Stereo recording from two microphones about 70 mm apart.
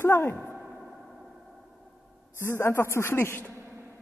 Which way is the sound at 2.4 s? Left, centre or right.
Left.